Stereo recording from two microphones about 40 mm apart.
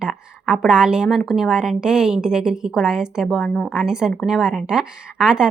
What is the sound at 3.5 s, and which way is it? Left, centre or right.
Speech, left.